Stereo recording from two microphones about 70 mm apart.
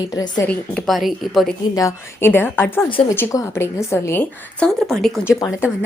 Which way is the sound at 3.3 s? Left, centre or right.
Left.